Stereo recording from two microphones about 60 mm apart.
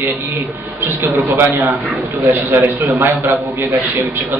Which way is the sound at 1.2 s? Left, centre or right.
Right.